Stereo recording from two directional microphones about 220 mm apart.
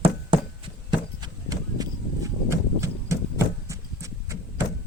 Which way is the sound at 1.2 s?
15° right (ahead or behind).